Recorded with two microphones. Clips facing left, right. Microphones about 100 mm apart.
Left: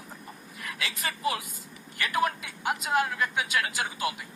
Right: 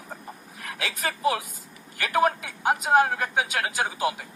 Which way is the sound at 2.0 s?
45° right (ahead or behind).